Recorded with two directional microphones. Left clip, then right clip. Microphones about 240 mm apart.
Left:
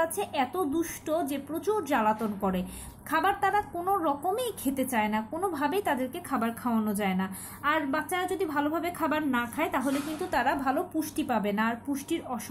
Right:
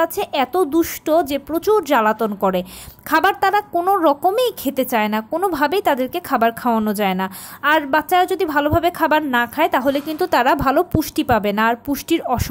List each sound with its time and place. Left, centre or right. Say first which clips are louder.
0.0 s a woman's voice: right 10 dB; right